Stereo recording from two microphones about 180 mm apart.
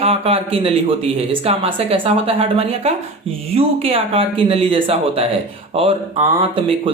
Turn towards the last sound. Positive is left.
turn(degrees=-30)  # may be behind; listen again after turning